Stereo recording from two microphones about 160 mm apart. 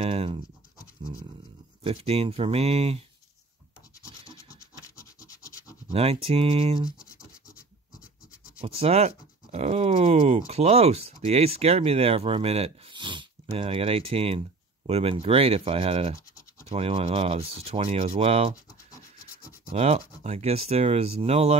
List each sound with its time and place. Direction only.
0.0 s scratch: 40° right (ahead or behind)
1.0 s dog: 30° right (ahead or behind)
1.8 s speech: 35° right (ahead or behind)
4.8 s scratch: 20° left (ahead or behind)
5.9 s speech: 35° right (ahead or behind)
8.6 s speech: 40° right (ahead or behind)
19.7 s speech: 40° right (ahead or behind)